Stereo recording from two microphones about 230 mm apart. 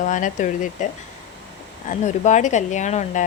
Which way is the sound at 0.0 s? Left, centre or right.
Left.